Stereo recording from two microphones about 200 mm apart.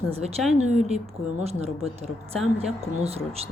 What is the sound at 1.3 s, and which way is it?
A woman's voice, 35° right (ahead or behind).